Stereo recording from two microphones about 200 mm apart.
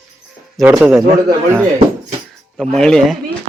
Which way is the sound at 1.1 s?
15° right (ahead or behind).